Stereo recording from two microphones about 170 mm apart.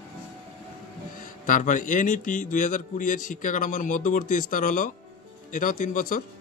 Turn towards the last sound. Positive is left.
turn(degrees=50)  # may be behind; listen again after turning